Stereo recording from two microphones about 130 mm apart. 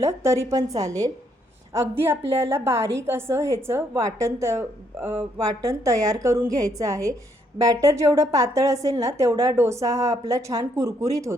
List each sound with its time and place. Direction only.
0.0 s a woman's voice: 25° right (ahead or behind)